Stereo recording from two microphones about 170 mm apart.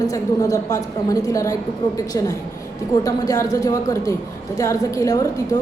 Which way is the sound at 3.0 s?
20° left (ahead or behind).